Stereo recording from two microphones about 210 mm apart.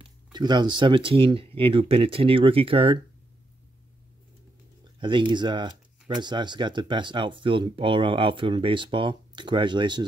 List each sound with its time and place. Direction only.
0.0 s speech: 20° right (ahead or behind)
5.0 s speech: 25° right (ahead or behind)